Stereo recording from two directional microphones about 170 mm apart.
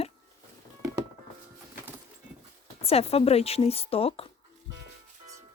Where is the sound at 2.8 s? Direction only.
35° left (ahead or behind).